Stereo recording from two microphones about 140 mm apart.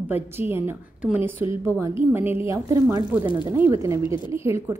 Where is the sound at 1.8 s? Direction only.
15° right (ahead or behind).